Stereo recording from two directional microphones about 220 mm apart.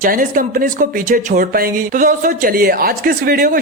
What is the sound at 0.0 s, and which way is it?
Speech, 40° right (ahead or behind).